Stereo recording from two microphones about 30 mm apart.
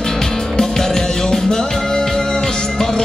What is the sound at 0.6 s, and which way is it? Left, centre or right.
Music, centre.